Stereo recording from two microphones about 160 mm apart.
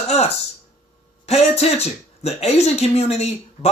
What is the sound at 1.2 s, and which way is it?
Speech, 40° left (ahead or behind).